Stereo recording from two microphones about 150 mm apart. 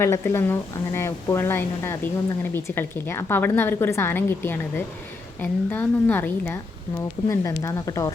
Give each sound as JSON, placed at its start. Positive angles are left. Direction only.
{"t": 0.0, "sound": "a woman's voice", "side_deg": 20}